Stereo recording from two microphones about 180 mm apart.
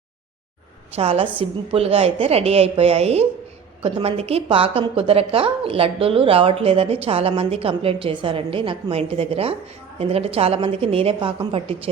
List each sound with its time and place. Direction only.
0.9 s a woman's voice: 30° right (ahead or behind)